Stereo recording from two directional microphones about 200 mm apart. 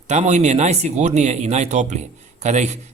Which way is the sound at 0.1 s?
35° right (ahead or behind).